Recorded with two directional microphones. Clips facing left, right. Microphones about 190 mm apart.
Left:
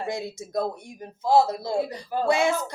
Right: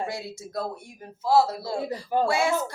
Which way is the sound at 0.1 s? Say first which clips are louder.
Left 4 dB; 20° left (ahead or behind).